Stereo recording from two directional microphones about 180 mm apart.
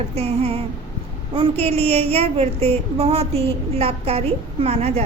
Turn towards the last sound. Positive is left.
turn(degrees=-35)  # may be behind; listen again after turning